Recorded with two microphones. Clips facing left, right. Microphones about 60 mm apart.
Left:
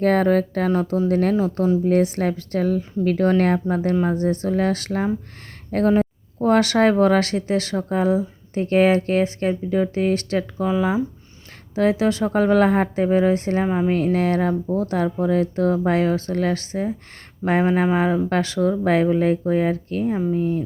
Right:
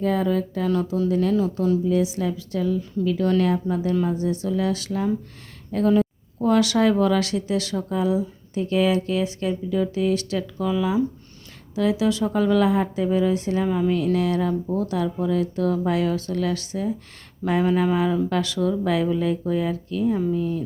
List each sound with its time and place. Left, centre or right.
0.0 s a woman's voice: left
0.7 s speech: left
1.8 s a woman's voice: left